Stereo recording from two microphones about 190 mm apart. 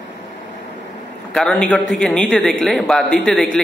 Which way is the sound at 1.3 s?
5° left (ahead or behind).